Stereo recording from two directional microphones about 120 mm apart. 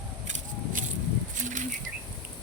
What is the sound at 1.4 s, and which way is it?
Bird, 90° right.